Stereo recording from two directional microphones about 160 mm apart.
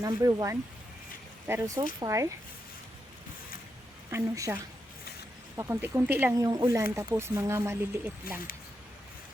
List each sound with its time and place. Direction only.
0.0 s speech: 20° right (ahead or behind)
4.1 s speech: 20° right (ahead or behind)